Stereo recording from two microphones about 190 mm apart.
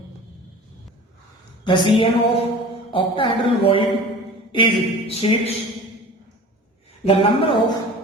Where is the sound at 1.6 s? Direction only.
25° left (ahead or behind).